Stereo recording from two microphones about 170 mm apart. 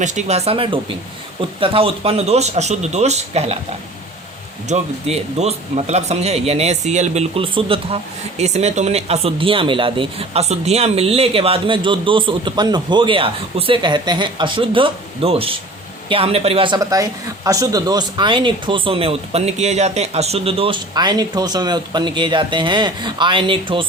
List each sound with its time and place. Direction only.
0.0 s speech: 45° right (ahead or behind)
4.7 s a man's voice: 40° right (ahead or behind)